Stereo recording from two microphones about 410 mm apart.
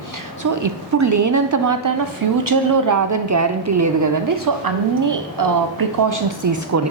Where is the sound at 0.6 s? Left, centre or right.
Right.